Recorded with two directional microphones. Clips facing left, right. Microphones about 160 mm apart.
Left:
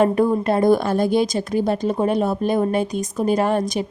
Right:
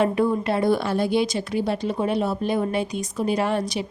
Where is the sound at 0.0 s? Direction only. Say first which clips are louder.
Left 4 dB; 45° left (ahead or behind).